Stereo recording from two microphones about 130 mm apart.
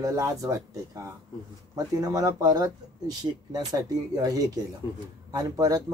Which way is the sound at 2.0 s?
25° right (ahead or behind).